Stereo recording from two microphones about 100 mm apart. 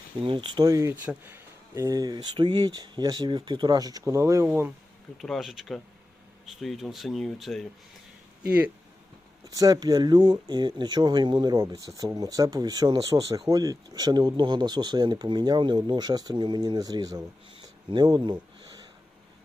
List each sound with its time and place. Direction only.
0.2 s speech: 55° right (ahead or behind)
0.7 s speech: 30° right (ahead or behind)
2.1 s speech: 50° right (ahead or behind); by 4.4 s 30° right (ahead or behind)
4.4 s speech: 20° right (ahead or behind)
5.1 s speech: centre (ahead or behind)
8.4 s speech: 15° right (ahead or behind)
9.4 s speech: 35° right (ahead or behind)